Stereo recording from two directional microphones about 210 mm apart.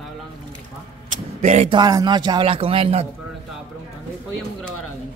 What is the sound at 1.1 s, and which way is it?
A man's voice, 35° right (ahead or behind).